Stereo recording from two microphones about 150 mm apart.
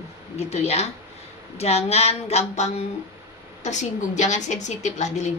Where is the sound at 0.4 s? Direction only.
45° left (ahead or behind).